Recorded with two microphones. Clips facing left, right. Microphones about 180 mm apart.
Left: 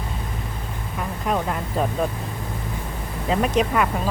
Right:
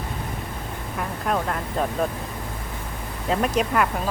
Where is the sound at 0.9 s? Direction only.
Centre (ahead or behind).